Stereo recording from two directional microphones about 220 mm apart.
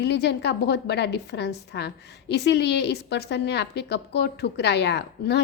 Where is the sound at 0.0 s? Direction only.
50° left (ahead or behind).